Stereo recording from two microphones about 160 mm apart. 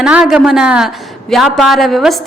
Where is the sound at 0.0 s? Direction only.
5° right (ahead or behind).